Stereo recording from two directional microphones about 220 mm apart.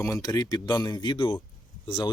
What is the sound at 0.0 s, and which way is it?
Speech, 15° left (ahead or behind).